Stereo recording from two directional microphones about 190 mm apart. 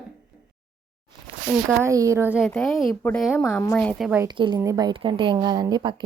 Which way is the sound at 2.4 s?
Centre (ahead or behind).